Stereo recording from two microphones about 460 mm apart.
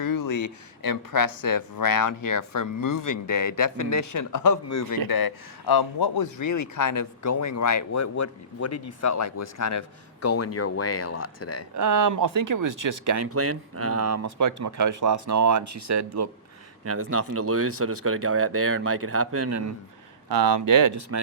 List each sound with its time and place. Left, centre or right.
0.0 s speech: left
5.0 s speech: left
11.8 s speech: right